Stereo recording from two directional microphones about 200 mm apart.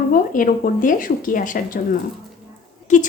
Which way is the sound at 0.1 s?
45° left (ahead or behind).